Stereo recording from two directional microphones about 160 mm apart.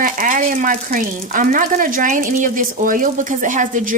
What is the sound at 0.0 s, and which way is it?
Speech, 55° right (ahead or behind).